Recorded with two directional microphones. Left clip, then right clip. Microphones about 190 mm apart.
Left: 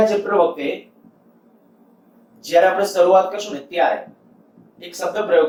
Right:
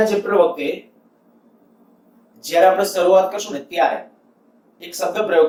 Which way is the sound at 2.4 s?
20° right (ahead or behind).